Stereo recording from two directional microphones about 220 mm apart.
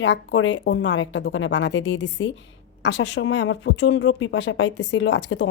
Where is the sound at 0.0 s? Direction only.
55° left (ahead or behind).